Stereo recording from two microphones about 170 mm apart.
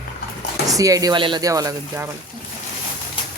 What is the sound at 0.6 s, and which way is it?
Speech, 20° right (ahead or behind).